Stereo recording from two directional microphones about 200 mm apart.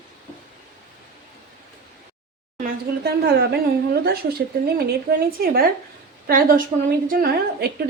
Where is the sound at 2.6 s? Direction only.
55° right (ahead or behind).